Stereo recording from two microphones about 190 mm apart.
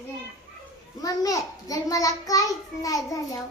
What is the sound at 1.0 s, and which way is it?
A child's voice, 20° left (ahead or behind).